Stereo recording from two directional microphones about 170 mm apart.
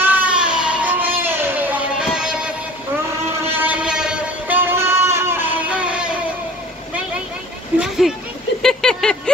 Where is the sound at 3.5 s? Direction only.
10° right (ahead or behind).